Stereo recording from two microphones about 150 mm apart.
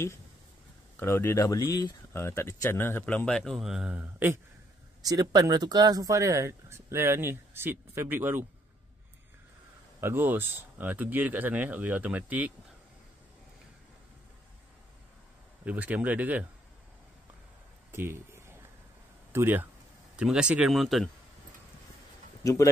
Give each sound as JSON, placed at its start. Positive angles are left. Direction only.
{"t": 0.9, "sound": "speech", "side_deg": 15}
{"t": 5.0, "sound": "speech", "side_deg": -25}
{"t": 9.9, "sound": "speech", "side_deg": -15}
{"t": 15.6, "sound": "speech", "side_deg": -10}
{"t": 17.9, "sound": "a sound", "side_deg": -15}
{"t": 19.3, "sound": "speech", "side_deg": -15}
{"t": 22.4, "sound": "speech", "side_deg": 20}